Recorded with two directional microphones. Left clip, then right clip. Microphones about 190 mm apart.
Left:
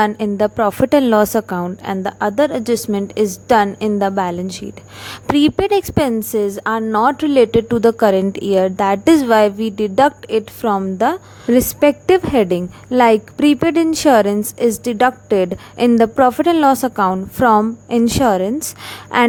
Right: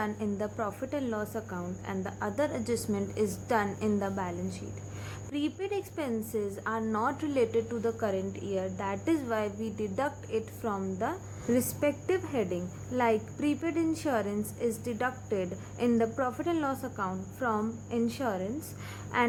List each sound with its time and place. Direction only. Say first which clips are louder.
0.0 s a woman's voice: left 18 dB; 50° left (ahead or behind)